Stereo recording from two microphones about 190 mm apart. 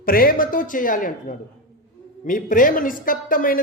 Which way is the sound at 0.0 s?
50° left (ahead or behind).